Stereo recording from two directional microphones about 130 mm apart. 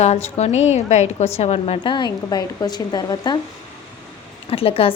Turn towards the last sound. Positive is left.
turn(degrees=45)  # may be behind; listen again after turning